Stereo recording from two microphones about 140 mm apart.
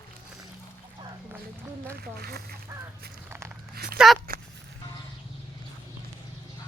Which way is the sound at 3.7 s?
90° right.